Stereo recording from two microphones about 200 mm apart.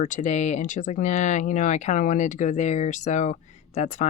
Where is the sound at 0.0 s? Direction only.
40° left (ahead or behind).